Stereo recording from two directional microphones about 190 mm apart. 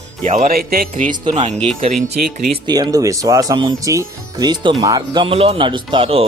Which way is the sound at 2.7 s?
20° right (ahead or behind).